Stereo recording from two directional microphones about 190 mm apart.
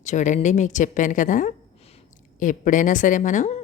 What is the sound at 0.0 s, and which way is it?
A woman's voice, 40° left (ahead or behind).